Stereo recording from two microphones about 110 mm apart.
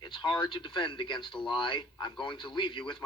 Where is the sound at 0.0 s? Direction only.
40° left (ahead or behind).